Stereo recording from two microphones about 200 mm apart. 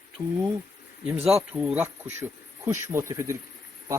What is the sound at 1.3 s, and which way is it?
Speech, 5° right (ahead or behind).